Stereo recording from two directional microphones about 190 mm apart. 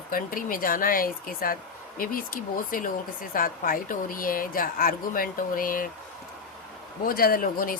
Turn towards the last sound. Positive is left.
turn(degrees=50)  # may be behind; listen again after turning